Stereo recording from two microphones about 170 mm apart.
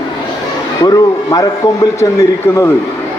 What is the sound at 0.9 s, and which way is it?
A man's voice, 20° left (ahead or behind).